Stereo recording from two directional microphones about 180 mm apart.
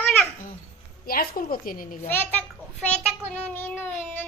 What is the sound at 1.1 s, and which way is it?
A woman's voice, 55° left (ahead or behind).